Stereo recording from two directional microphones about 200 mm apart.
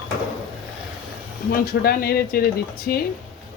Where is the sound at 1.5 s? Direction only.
50° left (ahead or behind).